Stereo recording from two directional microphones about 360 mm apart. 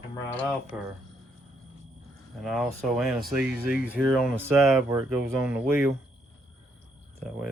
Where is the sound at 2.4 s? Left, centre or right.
Centre.